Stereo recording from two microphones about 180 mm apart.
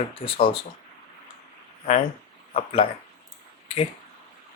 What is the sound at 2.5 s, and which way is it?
Speech, 30° left (ahead or behind).